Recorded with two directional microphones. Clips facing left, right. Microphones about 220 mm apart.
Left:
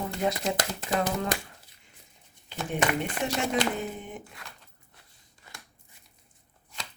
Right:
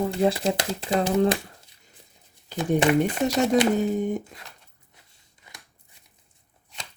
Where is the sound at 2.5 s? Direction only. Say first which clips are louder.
Right 8 dB; 35° right (ahead or behind).